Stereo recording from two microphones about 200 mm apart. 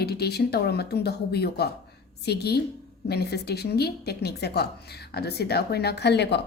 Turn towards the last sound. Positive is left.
turn(degrees=55)  # may be behind; listen again after turning